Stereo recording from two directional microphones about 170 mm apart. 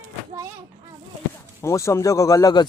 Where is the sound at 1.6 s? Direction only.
15° left (ahead or behind).